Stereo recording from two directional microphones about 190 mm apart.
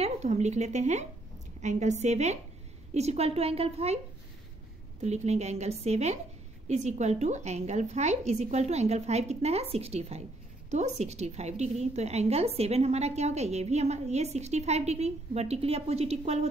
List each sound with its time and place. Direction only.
0.0 s a woman's voice: 35° right (ahead or behind)
5.0 s a woman's voice: 35° right (ahead or behind)